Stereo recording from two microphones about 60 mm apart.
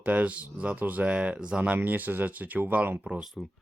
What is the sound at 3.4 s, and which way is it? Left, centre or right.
Speech, centre.